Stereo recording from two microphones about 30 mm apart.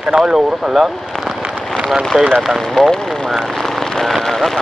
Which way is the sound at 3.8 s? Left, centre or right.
Centre.